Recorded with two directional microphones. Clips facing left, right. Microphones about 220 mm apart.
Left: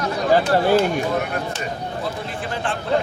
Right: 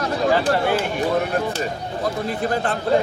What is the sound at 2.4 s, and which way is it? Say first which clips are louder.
Speech: right 4 dB; 40° right (ahead or behind).